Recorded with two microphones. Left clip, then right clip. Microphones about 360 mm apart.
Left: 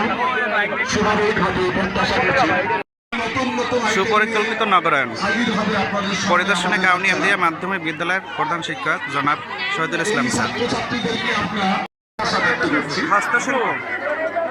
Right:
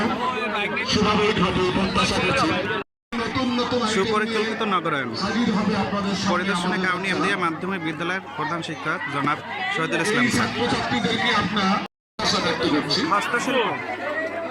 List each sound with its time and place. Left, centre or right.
2.3 s a sound: left
3.9 s a man's voice: centre
6.3 s a man's voice: centre
13.1 s a man's voice: centre